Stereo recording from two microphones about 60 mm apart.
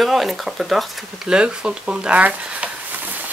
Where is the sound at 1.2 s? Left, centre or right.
Centre.